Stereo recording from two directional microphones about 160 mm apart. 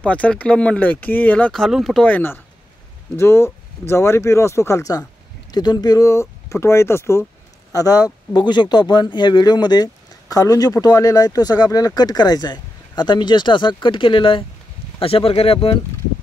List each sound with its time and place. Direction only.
0.0 s speech: 10° left (ahead or behind); by 15.8 s 35° left (ahead or behind)